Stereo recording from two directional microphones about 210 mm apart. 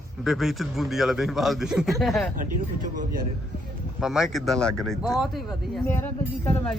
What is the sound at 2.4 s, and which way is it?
Speech, 40° right (ahead or behind).